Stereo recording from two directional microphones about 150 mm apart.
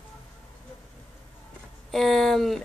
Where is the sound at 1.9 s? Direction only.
Centre (ahead or behind).